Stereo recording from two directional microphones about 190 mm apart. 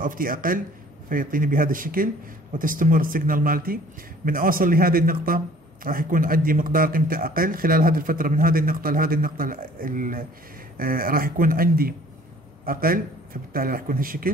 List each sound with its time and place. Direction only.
0.0 s a man's voice: 45° right (ahead or behind)